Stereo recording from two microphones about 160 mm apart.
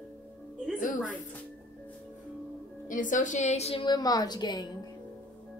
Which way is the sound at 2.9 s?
55° left (ahead or behind).